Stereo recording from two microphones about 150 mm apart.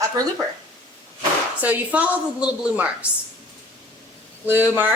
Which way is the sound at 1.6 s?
10° right (ahead or behind).